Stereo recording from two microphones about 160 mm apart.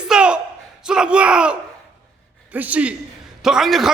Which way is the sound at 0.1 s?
5° right (ahead or behind).